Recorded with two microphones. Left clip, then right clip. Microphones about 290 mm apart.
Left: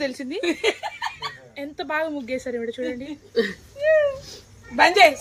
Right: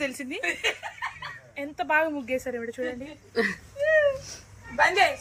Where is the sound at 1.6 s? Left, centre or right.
Centre.